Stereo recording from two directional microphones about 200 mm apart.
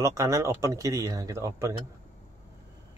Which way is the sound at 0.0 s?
15° right (ahead or behind).